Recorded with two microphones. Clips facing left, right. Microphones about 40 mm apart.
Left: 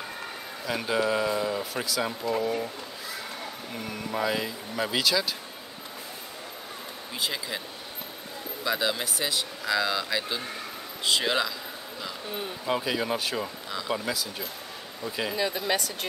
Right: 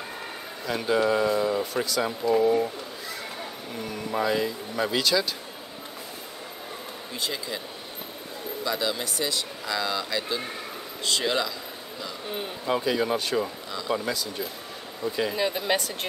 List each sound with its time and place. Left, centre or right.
0.7 s speech: centre
3.7 s speech: centre
7.2 s speech: centre
8.6 s speech: centre
12.6 s speech: centre
15.3 s speech: centre